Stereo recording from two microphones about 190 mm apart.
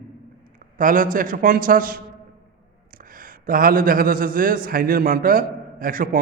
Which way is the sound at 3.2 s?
50° right (ahead or behind).